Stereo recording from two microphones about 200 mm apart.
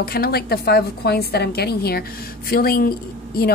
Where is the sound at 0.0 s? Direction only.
50° left (ahead or behind).